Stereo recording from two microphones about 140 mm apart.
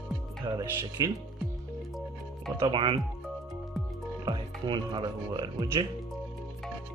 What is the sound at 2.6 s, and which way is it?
Speech, 35° right (ahead or behind).